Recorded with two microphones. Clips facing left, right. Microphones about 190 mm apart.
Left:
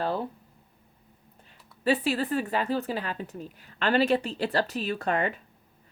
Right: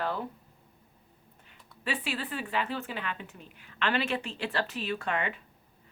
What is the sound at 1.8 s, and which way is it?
Speech, 40° left (ahead or behind).